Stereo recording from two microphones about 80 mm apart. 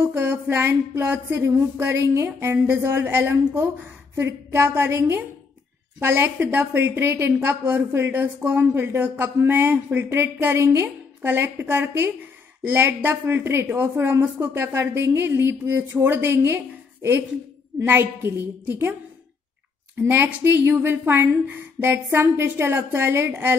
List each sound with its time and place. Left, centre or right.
0.0 s speech: right
20.0 s speech: right